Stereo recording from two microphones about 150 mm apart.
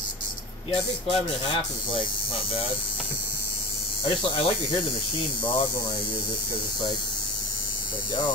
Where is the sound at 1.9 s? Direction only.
35° left (ahead or behind).